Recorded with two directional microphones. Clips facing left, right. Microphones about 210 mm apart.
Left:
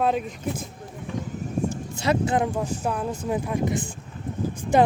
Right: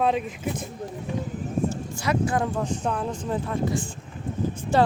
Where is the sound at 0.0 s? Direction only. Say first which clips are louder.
Even; centre (ahead or behind).